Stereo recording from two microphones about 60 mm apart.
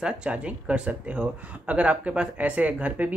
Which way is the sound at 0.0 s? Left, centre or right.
Centre.